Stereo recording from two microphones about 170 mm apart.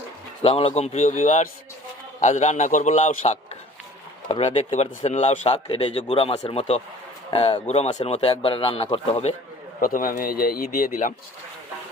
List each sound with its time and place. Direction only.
0.4 s a man's voice: 35° left (ahead or behind)
9.8 s a man's voice: 55° left (ahead or behind)